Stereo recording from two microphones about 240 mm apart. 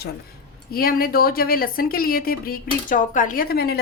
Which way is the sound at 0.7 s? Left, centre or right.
Left.